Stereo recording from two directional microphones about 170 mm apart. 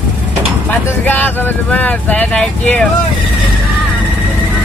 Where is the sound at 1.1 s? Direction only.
10° left (ahead or behind).